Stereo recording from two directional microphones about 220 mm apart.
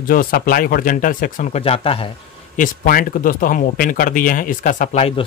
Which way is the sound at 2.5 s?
40° left (ahead or behind).